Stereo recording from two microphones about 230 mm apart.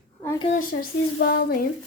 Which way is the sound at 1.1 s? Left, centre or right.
Left.